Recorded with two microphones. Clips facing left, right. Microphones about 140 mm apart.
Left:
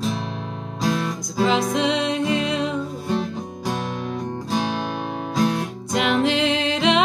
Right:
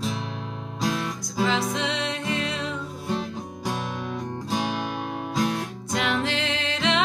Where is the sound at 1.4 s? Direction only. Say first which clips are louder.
Left 6 dB; 15° left (ahead or behind).